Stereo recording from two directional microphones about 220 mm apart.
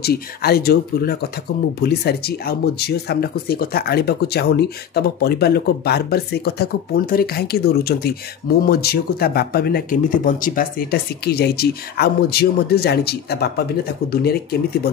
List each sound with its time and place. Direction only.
0.0 s speech: 45° left (ahead or behind)